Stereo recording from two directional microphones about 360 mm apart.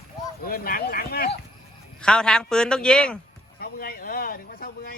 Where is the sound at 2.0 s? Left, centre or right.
Centre.